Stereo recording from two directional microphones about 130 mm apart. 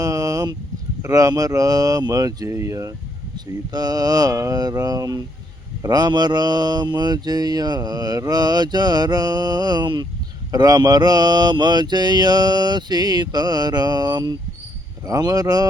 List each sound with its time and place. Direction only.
0.0 s a sound: 25° right (ahead or behind)
1.0 s speech: 25° right (ahead or behind)
5.8 s mantra: 30° right (ahead or behind)
15.0 s speech: 25° right (ahead or behind)